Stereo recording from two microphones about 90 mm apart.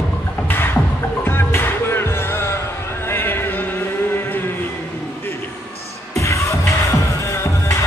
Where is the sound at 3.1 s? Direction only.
25° left (ahead or behind).